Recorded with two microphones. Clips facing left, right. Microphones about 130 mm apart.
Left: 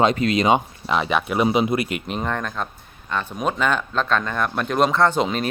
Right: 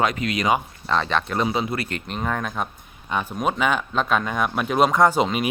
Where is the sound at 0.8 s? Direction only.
10° left (ahead or behind).